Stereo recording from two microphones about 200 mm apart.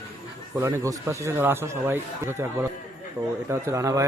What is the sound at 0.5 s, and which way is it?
Speech, 15° right (ahead or behind).